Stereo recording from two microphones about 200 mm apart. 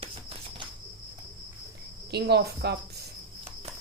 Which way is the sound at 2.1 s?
55° right (ahead or behind).